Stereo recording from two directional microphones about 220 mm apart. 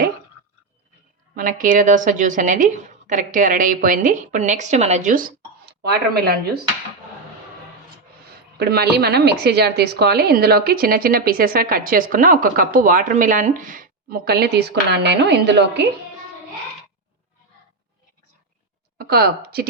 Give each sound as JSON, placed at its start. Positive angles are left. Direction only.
{"t": 1.4, "sound": "a woman's voice", "side_deg": -40}
{"t": 8.5, "sound": "a woman's voice", "side_deg": -50}
{"t": 18.9, "sound": "speech", "side_deg": -45}